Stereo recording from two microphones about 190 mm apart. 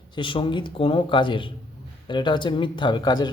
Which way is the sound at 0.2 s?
25° left (ahead or behind).